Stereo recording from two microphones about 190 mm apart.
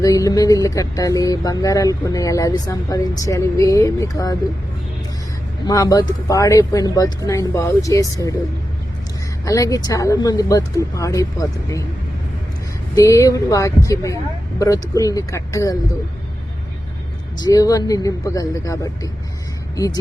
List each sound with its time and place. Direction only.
0.0 s speech: 20° left (ahead or behind)
5.6 s speech: 20° left (ahead or behind)
9.4 s speech: 20° left (ahead or behind)
12.9 s speech: 15° left (ahead or behind)
17.4 s speech: 20° left (ahead or behind)